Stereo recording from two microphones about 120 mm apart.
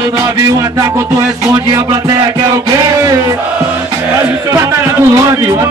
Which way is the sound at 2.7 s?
30° right (ahead or behind).